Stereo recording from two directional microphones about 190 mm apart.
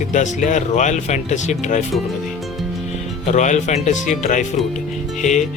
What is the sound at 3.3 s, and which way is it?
Speech, 40° left (ahead or behind).